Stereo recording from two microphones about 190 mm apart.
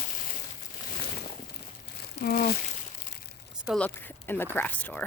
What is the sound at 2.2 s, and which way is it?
Speech, 50° left (ahead or behind).